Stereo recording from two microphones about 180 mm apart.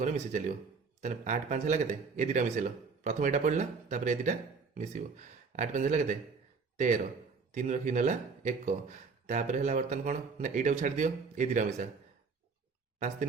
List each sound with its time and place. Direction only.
0.0 s speech: 45° right (ahead or behind)